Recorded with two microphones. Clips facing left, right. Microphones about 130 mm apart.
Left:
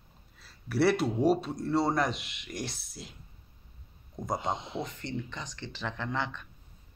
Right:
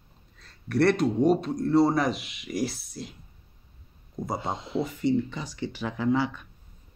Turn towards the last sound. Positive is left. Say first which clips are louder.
# right 9 dB
turn(degrees=-10)  # may be behind; listen again after turning